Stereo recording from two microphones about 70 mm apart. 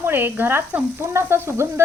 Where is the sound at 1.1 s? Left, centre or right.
Right.